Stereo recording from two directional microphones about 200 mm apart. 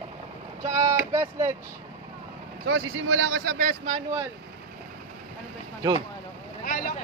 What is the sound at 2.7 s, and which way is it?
Speech, 65° right (ahead or behind).